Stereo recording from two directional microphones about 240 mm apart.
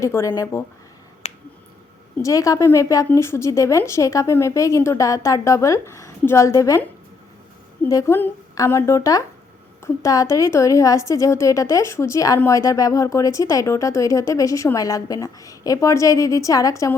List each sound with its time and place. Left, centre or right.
0.0 s a woman's voice: centre
1.2 s finger snapping: left
2.2 s a woman's voice: centre
7.9 s a woman's voice: centre